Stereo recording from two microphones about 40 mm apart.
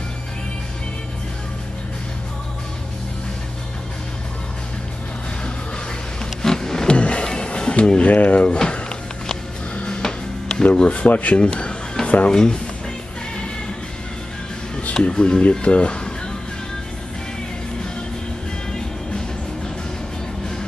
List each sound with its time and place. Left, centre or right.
6.4 s wild animals: centre
6.9 s music: left
8.0 s speech: left
8.5 s a sound: left
10.6 s speech: left
15.0 s speech: left